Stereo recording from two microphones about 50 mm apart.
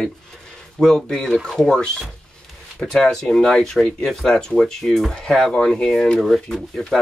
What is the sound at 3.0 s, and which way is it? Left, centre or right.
Speech, centre.